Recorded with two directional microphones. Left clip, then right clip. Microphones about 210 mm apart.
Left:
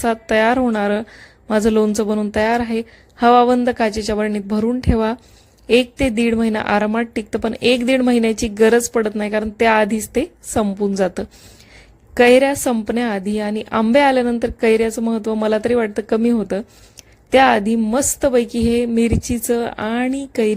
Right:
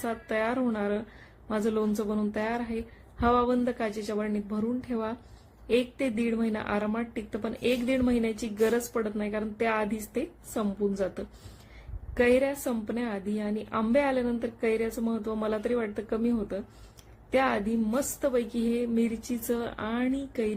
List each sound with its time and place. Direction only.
0.0 s a woman's voice: 40° left (ahead or behind)